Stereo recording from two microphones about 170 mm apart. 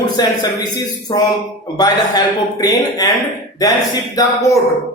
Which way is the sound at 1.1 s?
20° left (ahead or behind).